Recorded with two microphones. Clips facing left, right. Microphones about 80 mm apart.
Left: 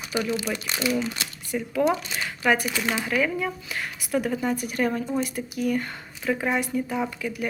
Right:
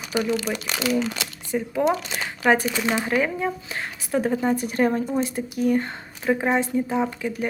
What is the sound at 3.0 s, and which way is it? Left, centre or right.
Speech, right.